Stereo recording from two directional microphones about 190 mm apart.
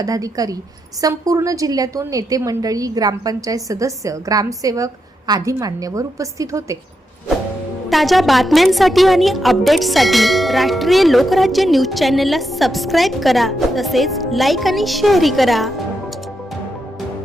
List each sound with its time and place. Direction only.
0.0 s a woman's voice: 20° right (ahead or behind)
7.9 s a woman's voice: centre (ahead or behind)